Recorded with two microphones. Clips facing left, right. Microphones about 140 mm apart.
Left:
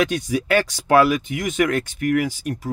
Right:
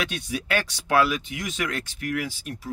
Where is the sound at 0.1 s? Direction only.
45° left (ahead or behind).